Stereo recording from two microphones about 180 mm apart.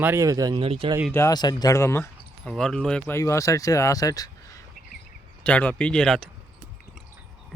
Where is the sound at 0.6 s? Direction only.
30° right (ahead or behind).